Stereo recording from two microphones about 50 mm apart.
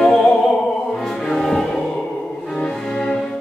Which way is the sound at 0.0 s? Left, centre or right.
Centre.